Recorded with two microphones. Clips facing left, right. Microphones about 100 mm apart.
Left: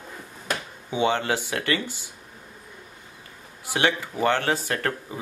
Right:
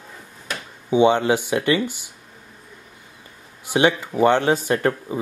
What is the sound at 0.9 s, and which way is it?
Speech, 20° right (ahead or behind).